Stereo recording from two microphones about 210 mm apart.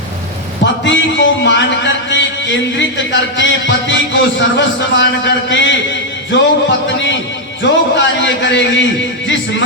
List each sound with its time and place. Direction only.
0.9 s speech: 60° left (ahead or behind)
7.6 s speech: 60° left (ahead or behind)